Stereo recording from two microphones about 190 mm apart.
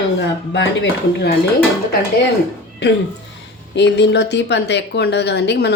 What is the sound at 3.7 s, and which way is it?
A woman's voice, 65° left (ahead or behind).